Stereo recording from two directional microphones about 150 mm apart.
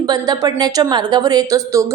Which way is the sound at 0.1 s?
25° right (ahead or behind).